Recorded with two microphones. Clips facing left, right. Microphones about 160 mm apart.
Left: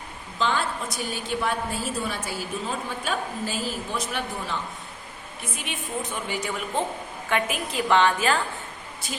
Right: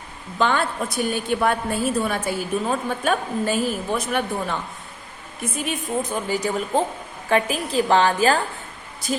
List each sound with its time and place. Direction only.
0.3 s a woman's voice: 55° right (ahead or behind)
5.4 s a woman's voice: 40° right (ahead or behind)